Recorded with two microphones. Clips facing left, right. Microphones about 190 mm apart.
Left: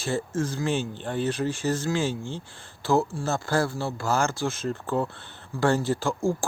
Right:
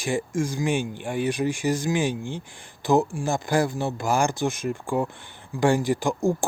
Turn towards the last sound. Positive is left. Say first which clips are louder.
# right 2 dB
turn(degrees=-15)  # may be behind; listen again after turning